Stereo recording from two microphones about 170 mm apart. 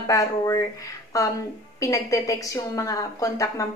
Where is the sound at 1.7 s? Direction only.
20° left (ahead or behind).